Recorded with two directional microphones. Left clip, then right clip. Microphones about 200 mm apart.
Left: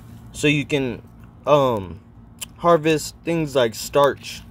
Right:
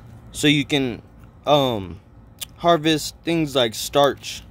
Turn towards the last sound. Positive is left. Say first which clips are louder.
# even
turn(degrees=-15)  # may be behind; listen again after turning